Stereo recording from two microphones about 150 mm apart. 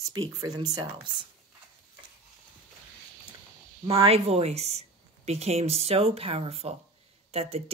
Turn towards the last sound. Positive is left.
turn(degrees=-40)  # may be behind; listen again after turning